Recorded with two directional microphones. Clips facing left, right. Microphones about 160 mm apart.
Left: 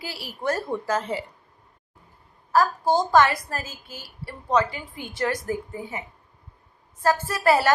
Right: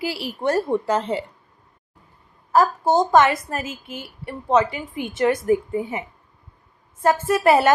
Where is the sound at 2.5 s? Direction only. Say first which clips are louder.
Right 3 dB; 20° right (ahead or behind).